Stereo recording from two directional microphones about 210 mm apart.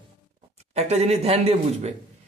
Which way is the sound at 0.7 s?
30° right (ahead or behind).